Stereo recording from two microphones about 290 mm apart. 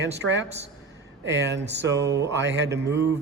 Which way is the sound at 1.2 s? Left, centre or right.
Right.